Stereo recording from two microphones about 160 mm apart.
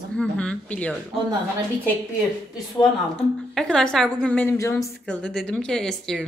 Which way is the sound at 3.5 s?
5° left (ahead or behind).